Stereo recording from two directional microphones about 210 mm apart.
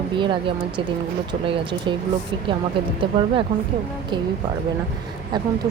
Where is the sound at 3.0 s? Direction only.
25° right (ahead or behind).